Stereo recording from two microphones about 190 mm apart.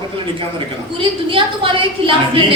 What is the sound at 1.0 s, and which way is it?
A woman's voice, 25° right (ahead or behind).